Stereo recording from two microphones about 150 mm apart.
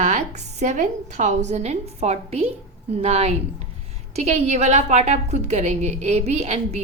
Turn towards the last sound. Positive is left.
turn(degrees=-50)  # may be behind; listen again after turning